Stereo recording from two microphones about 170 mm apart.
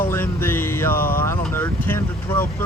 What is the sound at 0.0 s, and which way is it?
Music, 15° left (ahead or behind).